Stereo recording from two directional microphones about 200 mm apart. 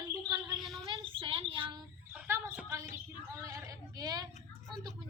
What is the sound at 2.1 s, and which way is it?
Speech, 10° right (ahead or behind).